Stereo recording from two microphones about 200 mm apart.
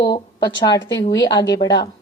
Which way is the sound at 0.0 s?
20° left (ahead or behind).